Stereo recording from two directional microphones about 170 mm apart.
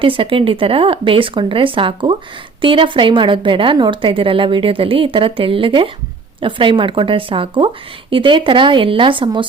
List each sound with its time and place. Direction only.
0.0 s speech: 30° right (ahead or behind)